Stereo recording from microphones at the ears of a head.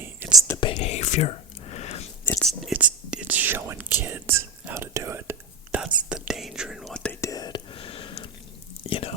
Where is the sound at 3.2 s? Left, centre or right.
Right.